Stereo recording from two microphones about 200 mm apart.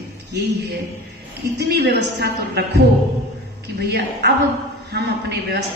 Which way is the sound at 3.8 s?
55° right (ahead or behind).